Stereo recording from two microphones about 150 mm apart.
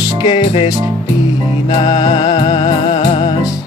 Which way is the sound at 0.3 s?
40° left (ahead or behind).